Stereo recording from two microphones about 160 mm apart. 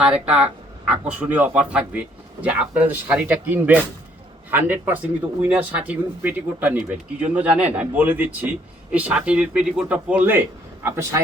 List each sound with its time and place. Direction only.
0.0 s speech: 5° right (ahead or behind)